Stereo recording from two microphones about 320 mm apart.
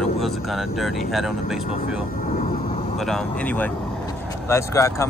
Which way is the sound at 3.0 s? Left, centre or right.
Centre.